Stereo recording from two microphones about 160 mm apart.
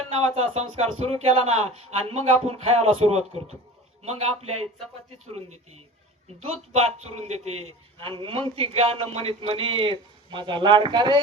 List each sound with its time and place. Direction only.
0.2 s a man's voice: 40° right (ahead or behind)